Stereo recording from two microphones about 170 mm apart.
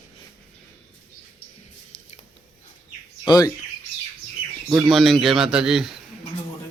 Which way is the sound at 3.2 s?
25° left (ahead or behind).